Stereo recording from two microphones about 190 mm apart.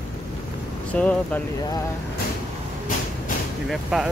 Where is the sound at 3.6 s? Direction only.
Centre (ahead or behind).